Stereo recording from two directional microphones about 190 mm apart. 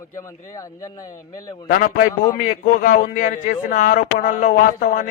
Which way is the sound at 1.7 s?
45° left (ahead or behind).